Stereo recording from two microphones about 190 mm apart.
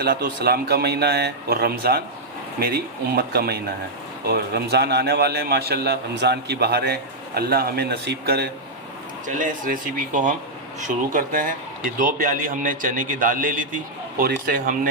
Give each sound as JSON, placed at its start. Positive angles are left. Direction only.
{"t": 0.0, "sound": "a man's voice", "side_deg": -60}
{"t": 9.2, "sound": "a man's voice", "side_deg": -45}